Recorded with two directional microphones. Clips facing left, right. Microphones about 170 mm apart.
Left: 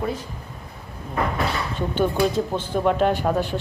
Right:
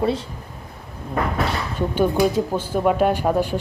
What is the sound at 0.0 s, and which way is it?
Speech, 30° right (ahead or behind).